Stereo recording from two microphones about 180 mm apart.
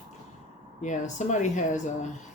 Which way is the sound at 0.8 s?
40° left (ahead or behind).